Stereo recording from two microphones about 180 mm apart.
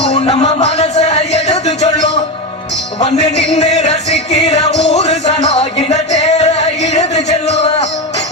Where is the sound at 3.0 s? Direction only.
35° left (ahead or behind).